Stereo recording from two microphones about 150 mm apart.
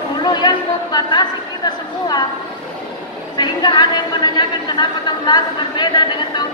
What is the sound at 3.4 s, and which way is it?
A woman's voice, 30° left (ahead or behind).